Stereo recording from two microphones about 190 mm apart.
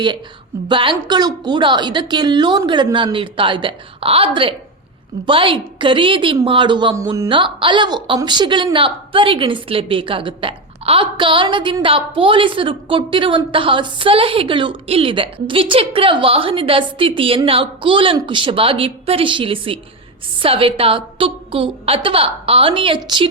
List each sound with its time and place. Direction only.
0.7 s a woman's voice: 25° right (ahead or behind)